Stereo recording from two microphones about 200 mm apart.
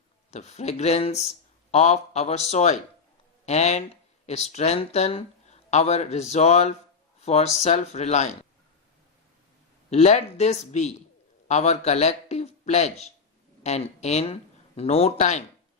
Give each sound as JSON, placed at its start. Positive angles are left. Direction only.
{"t": 0.3, "sound": "speech", "side_deg": 35}
{"t": 9.9, "sound": "a man's voice", "side_deg": 35}